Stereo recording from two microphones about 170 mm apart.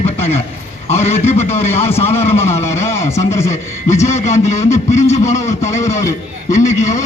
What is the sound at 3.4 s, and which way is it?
A man's voice, 40° left (ahead or behind).